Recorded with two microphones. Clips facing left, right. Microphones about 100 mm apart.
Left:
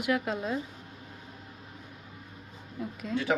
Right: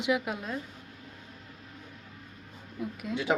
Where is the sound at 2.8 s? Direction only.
Centre (ahead or behind).